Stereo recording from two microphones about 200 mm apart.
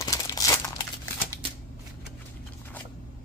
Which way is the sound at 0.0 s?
15° left (ahead or behind).